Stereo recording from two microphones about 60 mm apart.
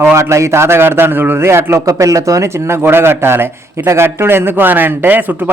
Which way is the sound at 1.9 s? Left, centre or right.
Right.